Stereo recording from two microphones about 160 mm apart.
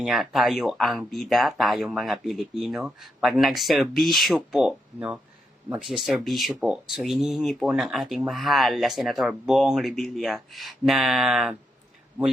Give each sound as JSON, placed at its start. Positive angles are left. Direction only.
{"t": 0.0, "sound": "speech", "side_deg": 0}